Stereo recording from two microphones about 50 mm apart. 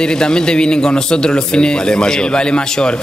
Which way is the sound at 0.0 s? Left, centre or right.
Centre.